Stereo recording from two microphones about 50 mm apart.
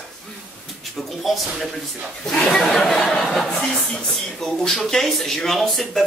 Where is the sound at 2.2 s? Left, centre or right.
Centre.